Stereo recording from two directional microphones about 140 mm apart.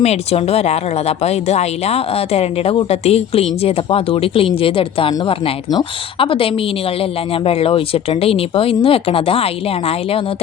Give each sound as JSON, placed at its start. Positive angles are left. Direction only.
{"t": 0.0, "sound": "a woman's voice", "side_deg": 50}